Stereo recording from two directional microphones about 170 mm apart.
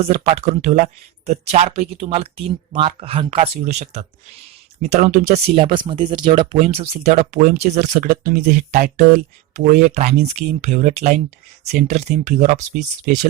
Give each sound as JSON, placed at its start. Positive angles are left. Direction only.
{"t": 0.0, "sound": "speech", "side_deg": -35}